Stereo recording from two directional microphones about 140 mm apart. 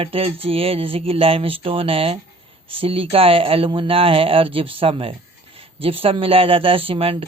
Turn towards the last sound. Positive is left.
turn(degrees=-40)  # may be behind; listen again after turning